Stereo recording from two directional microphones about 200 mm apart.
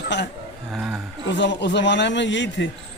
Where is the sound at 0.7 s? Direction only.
5° right (ahead or behind).